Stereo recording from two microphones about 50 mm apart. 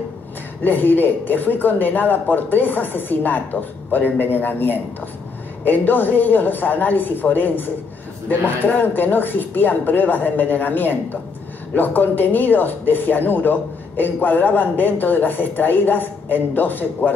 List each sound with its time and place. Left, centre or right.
0.7 s speech: left